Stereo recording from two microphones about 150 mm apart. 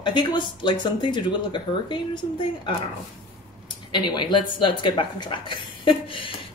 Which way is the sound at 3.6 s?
30° left (ahead or behind).